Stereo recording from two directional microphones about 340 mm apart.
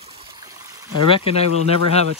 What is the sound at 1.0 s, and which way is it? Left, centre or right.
Speech, centre.